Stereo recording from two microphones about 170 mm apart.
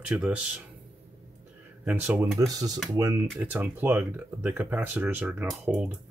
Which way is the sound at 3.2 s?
5° right (ahead or behind).